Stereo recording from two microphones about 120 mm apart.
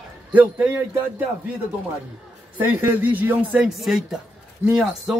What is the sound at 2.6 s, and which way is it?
Speech, 15° right (ahead or behind).